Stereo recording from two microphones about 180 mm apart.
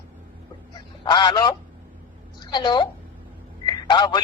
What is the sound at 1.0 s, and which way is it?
A woman's voice, 25° left (ahead or behind).